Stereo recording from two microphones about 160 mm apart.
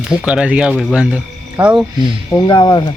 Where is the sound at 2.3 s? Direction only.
25° left (ahead or behind).